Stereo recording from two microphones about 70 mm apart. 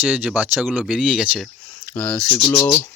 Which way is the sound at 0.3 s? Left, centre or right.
Right.